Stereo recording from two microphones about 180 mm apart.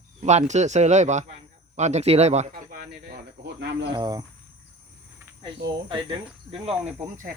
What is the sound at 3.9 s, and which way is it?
Cricket, 20° right (ahead or behind).